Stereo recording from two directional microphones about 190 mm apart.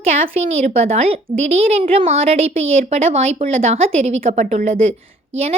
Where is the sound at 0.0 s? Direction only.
35° right (ahead or behind).